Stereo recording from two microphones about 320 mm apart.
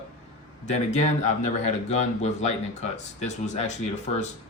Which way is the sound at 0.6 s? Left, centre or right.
Left.